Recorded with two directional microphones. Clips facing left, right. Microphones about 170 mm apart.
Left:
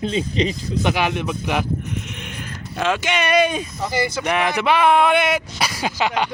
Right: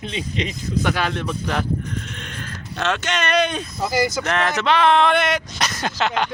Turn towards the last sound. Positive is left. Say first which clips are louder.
# left 1 dB
turn(degrees=10)  # may be behind; listen again after turning